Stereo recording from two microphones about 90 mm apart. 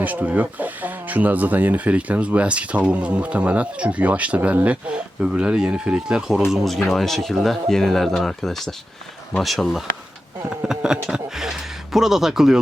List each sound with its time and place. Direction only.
0.0 s speech: 20° right (ahead or behind)